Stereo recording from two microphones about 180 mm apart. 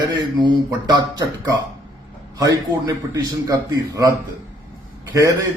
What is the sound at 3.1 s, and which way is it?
A man's voice, 20° right (ahead or behind).